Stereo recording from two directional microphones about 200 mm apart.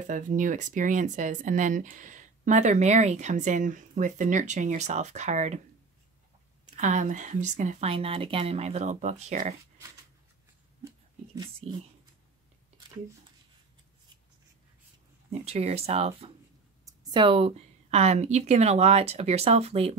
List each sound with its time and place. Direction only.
0.0 s speech: 40° right (ahead or behind)
6.6 s speech: 35° right (ahead or behind)
11.6 s speech: 30° right (ahead or behind)
15.4 s speech: 30° right (ahead or behind)